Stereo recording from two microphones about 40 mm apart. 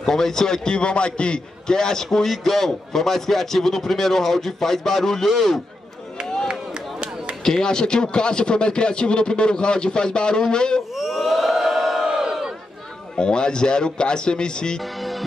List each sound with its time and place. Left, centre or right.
0.0 s a man's voice: centre
7.4 s speech: centre
11.0 s crowd: centre
12.1 s battle cry: centre
13.1 s speech: left